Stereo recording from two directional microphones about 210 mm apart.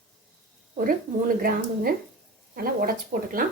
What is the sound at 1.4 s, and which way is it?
Speech, 45° right (ahead or behind).